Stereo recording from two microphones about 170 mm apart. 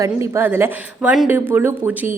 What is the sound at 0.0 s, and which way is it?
A woman's voice, 15° right (ahead or behind).